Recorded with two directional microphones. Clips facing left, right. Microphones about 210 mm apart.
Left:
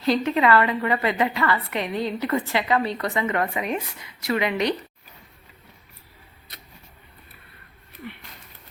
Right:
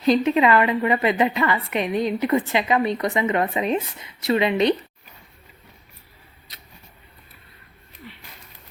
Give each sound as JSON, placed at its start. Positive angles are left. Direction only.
{"t": 0.0, "sound": "a woman's voice", "side_deg": -20}
{"t": 8.0, "sound": "pigeon", "side_deg": 55}